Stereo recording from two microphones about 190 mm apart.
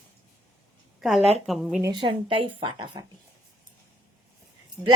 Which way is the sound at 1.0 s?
Centre (ahead or behind).